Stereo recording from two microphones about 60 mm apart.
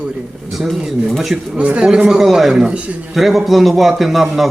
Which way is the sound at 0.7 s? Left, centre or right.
Centre.